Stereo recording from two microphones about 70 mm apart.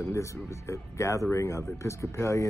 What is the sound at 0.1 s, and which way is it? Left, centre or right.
Speech, left.